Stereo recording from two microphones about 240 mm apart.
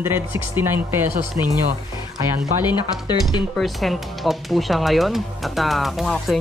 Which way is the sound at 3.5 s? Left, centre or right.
Centre.